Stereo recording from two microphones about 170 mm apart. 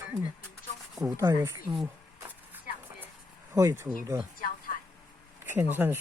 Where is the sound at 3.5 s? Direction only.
15° right (ahead or behind).